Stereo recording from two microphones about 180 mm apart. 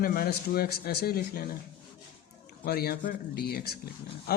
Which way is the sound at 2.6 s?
60° left (ahead or behind).